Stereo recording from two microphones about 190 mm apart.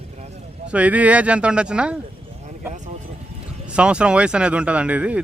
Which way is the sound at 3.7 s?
5° right (ahead or behind).